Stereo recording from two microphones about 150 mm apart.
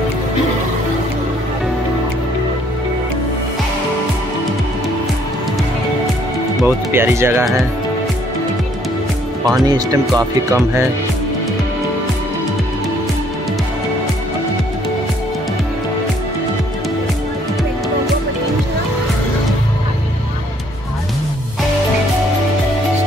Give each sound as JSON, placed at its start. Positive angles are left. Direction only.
{"t": 6.6, "sound": "speech", "side_deg": -15}
{"t": 9.7, "sound": "speech", "side_deg": -25}